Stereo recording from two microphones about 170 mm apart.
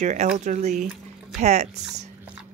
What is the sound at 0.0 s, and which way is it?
Speech, 40° right (ahead or behind).